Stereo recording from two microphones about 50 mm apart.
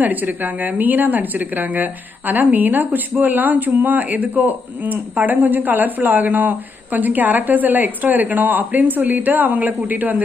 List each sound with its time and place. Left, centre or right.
0.0 s a woman's voice: right